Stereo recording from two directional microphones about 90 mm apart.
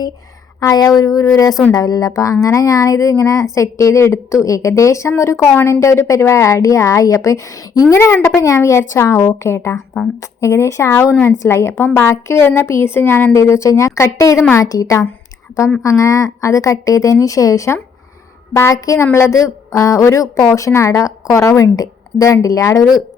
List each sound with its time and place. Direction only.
0.6 s speech: 40° left (ahead or behind)
7.9 s a woman's voice: 25° left (ahead or behind)